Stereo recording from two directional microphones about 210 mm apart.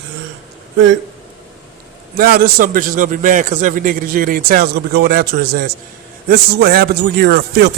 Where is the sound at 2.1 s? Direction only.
45° right (ahead or behind).